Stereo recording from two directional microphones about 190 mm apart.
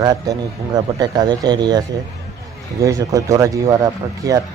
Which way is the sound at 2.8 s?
15° right (ahead or behind).